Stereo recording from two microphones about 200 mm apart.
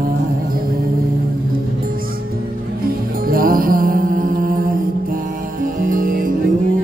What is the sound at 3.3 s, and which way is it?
Music, 45° right (ahead or behind).